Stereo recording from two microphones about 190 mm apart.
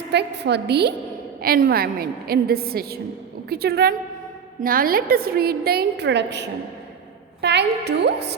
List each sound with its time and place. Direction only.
0.1 s a woman's voice: 60° right (ahead or behind)